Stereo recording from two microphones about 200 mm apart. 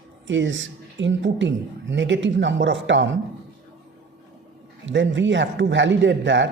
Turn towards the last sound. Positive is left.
turn(degrees=-65)  # may be behind; listen again after turning